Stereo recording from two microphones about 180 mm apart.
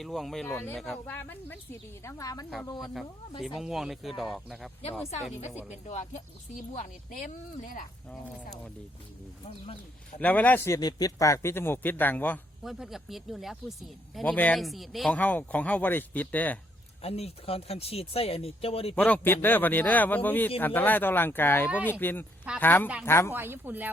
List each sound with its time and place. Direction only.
0.0 s speech: centre (ahead or behind)
0.4 s speech: 10° left (ahead or behind)
2.8 s speech: centre (ahead or behind)
5.9 s speech: 40° left (ahead or behind)
10.2 s speech: 10° left (ahead or behind)
17.0 s speech: 35° left (ahead or behind)
18.9 s speech: 10° left (ahead or behind)
23.3 s speech: 10° right (ahead or behind)